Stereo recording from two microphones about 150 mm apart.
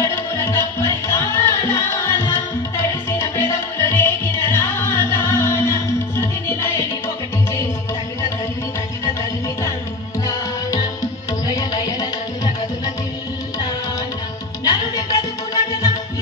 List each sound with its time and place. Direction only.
0.0 s music: 20° left (ahead or behind)
10.2 s music: 25° left (ahead or behind)
14.6 s music: 25° left (ahead or behind)